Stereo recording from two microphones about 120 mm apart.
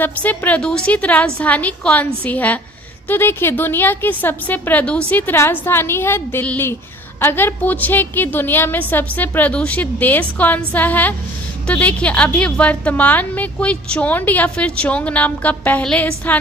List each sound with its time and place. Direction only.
0.0 s a woman's voice: 15° left (ahead or behind)